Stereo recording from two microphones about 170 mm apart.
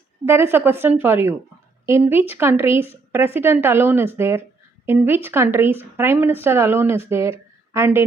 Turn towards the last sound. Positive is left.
turn(degrees=-15)  # may be behind; listen again after turning